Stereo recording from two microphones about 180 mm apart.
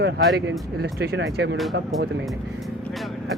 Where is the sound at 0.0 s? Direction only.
75° right (ahead or behind).